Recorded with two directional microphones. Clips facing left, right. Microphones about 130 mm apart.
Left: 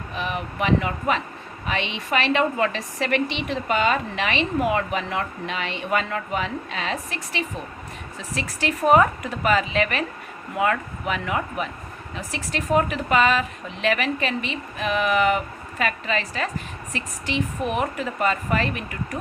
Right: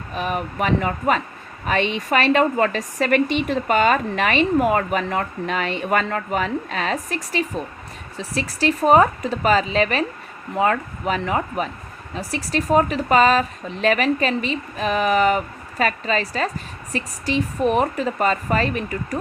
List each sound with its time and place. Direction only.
0.1 s a woman's voice: 45° right (ahead or behind)